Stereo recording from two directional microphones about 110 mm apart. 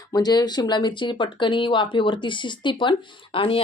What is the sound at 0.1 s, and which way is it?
Speech, 40° left (ahead or behind).